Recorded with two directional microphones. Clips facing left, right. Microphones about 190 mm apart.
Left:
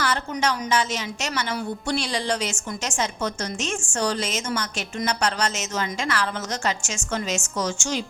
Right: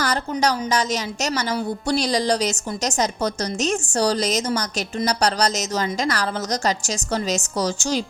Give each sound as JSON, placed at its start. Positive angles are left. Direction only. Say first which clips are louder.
{"t": 0.0, "sound": "a woman's voice", "louder": "right 3 dB", "side_deg": -40}